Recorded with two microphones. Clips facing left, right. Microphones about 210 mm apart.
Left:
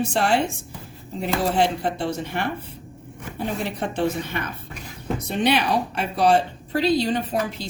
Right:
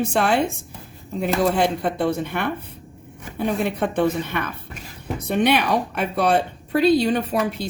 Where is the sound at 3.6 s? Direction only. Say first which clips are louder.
Right 3 dB; 55° right (ahead or behind).